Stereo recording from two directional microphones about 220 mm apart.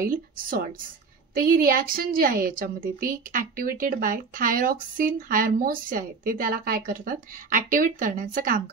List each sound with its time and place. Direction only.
0.1 s a woman's voice: 40° right (ahead or behind)